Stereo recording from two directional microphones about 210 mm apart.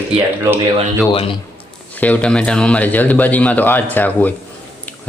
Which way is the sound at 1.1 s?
25° left (ahead or behind).